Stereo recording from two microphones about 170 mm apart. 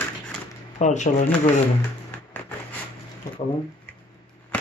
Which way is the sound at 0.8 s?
45° left (ahead or behind).